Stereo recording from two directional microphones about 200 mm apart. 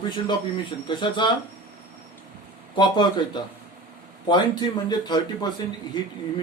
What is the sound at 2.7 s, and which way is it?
Speech, 20° left (ahead or behind).